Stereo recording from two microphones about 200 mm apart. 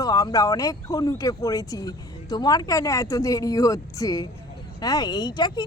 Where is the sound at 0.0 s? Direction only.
20° left (ahead or behind).